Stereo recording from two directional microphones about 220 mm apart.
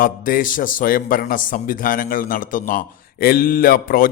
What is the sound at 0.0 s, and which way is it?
A man's voice, 40° left (ahead or behind).